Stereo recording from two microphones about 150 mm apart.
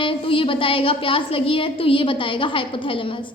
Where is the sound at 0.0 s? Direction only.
35° left (ahead or behind).